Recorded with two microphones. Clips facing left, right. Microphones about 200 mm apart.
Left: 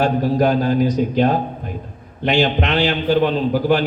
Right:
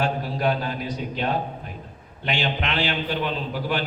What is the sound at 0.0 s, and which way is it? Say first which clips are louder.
A man's voice: left 8 dB; 40° left (ahead or behind).